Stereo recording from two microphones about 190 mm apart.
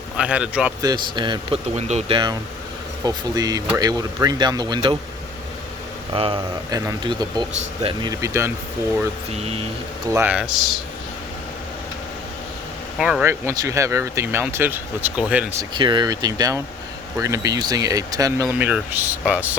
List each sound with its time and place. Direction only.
0.2 s speech: 5° right (ahead or behind)
0.8 s speech: 20° right (ahead or behind)
1.7 s speech: 35° right (ahead or behind)
6.1 s speech: 30° right (ahead or behind)
9.3 s speech: 35° right (ahead or behind)
10.1 s speech: 10° right (ahead or behind)
13.0 s speech: 5° right (ahead or behind)
13.2 s speech: 15° right (ahead or behind)
15.8 s speech: 25° right (ahead or behind); by 19.5 s 10° right (ahead or behind)